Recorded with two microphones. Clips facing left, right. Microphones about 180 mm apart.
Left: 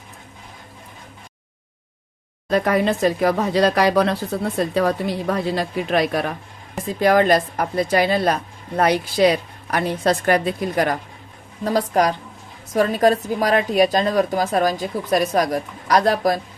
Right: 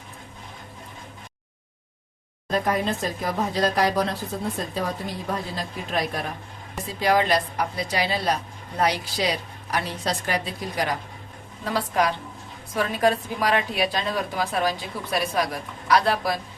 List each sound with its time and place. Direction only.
2.5 s speech: 75° left (ahead or behind)
7.0 s a woman's voice: 50° left (ahead or behind)
11.6 s a woman's voice: 40° left (ahead or behind)